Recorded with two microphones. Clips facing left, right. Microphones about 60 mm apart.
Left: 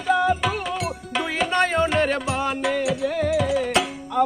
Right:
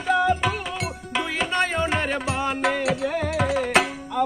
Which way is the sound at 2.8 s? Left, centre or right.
Right.